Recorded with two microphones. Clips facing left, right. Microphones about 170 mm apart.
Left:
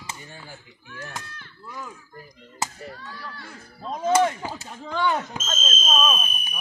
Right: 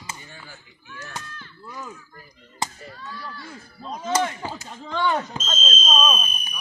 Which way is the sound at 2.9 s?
55° left (ahead or behind).